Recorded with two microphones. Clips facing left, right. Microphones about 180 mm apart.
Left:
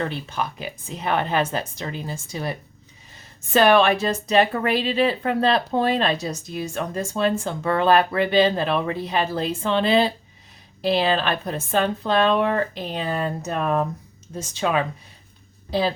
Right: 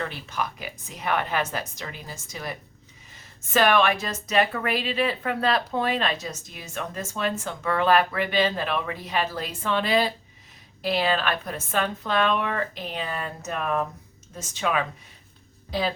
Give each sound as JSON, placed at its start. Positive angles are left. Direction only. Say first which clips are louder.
{"t": 0.0, "sound": "speech", "louder": "left 4 dB", "side_deg": 30}